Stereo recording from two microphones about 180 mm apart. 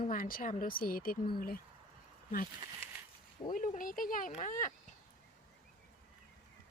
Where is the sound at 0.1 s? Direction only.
50° left (ahead or behind).